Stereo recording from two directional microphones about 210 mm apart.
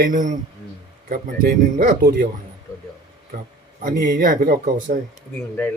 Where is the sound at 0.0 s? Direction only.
40° right (ahead or behind).